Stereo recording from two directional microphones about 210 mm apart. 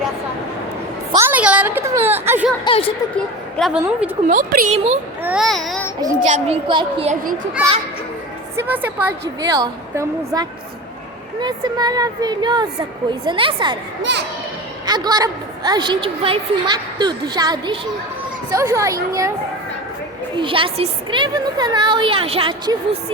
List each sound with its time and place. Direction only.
1.2 s a woman's voice: 5° right (ahead or behind)
2.6 s a woman's voice: 25° left (ahead or behind)
3.6 s speech: 5° right (ahead or behind)
4.3 s speech: 40° right (ahead or behind)
5.2 s speech: 5° right (ahead or behind)
6.1 s a woman's voice: 35° right (ahead or behind)
8.5 s a woman's voice: 10° right (ahead or behind)
14.0 s a child's voice: 55° right (ahead or behind)
14.8 s a woman's voice: 20° right (ahead or behind)
20.3 s a woman's voice: 25° right (ahead or behind)